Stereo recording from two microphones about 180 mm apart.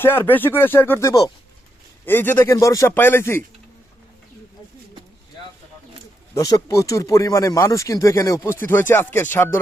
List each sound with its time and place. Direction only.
0.0 s speech: 10° left (ahead or behind)
6.3 s speech: 20° left (ahead or behind)